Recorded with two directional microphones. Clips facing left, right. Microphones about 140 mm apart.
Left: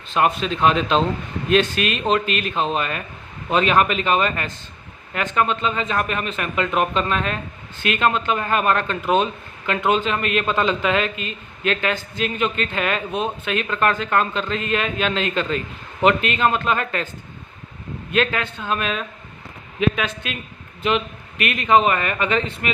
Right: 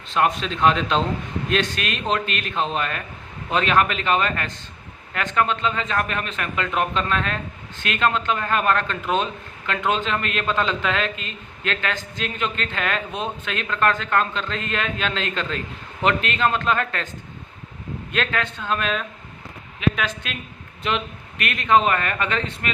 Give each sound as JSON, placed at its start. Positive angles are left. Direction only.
{"t": 0.1, "sound": "a man's voice", "side_deg": 10}
{"t": 18.1, "sound": "a man's voice", "side_deg": 10}
{"t": 20.2, "sound": "a man's voice", "side_deg": 10}